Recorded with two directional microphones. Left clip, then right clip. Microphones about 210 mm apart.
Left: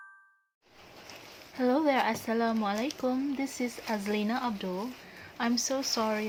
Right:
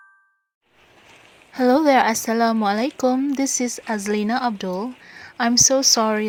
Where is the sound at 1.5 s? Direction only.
50° right (ahead or behind).